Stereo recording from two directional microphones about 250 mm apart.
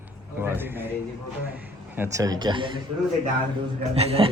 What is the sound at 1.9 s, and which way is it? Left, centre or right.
Speech, centre.